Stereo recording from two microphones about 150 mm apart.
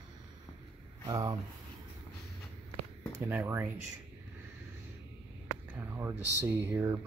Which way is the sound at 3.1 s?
15° right (ahead or behind).